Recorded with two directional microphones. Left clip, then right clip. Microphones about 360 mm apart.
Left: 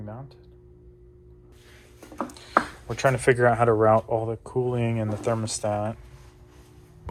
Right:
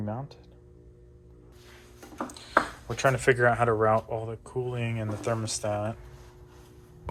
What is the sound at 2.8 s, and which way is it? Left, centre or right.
Speech, centre.